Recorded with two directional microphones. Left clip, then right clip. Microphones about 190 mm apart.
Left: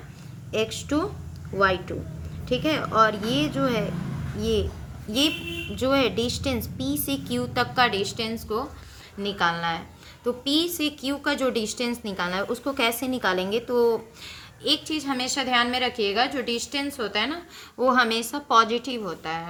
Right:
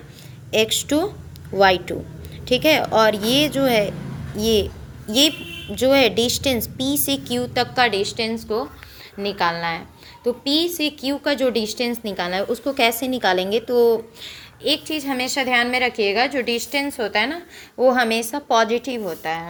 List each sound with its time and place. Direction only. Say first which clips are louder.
0.5 s speech: right 7 dB; 20° right (ahead or behind)
5.7 s a woman's voice: right 7 dB; 15° right (ahead or behind)